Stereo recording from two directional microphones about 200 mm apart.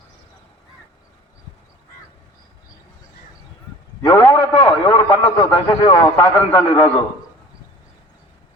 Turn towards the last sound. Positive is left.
turn(degrees=10)  # may be behind; listen again after turning